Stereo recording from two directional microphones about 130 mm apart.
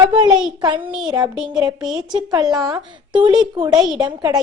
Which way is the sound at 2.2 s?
30° right (ahead or behind).